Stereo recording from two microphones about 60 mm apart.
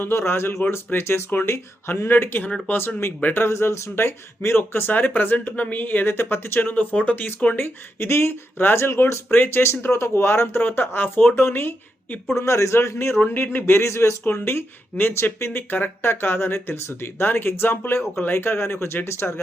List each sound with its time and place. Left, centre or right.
0.0 s speech: left
3.4 s speech: left
7.5 s speech: left
12.4 s speech: left
13.8 s speech: left
14.3 s speech: left
15.4 s speech: left
15.7 s speech: left